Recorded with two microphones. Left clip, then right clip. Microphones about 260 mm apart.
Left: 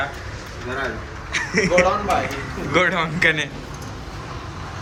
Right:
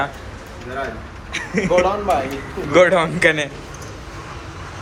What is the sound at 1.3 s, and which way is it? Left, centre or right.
Speech, centre.